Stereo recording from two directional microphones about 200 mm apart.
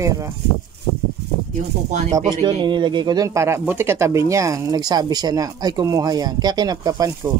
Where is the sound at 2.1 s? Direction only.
20° right (ahead or behind).